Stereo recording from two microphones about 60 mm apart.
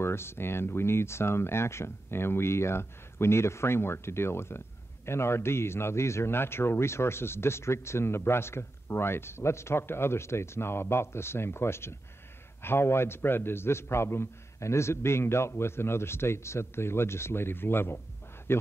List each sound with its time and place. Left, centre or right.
0.0 s speech: left